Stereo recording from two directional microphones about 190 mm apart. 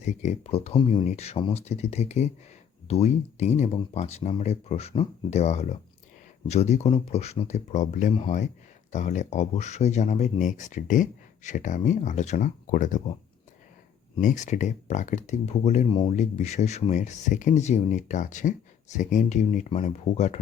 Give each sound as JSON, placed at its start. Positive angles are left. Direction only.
{"t": 0.0, "sound": "speech", "side_deg": 35}
{"t": 14.2, "sound": "speech", "side_deg": 40}
{"t": 15.9, "sound": "speech", "side_deg": 25}
{"t": 16.1, "sound": "speech", "side_deg": 35}